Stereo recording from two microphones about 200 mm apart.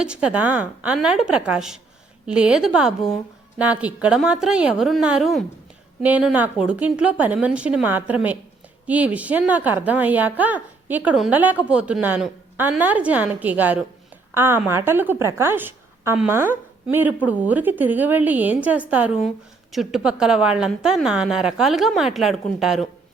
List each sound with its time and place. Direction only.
0.0 s a woman's voice: 5° right (ahead or behind)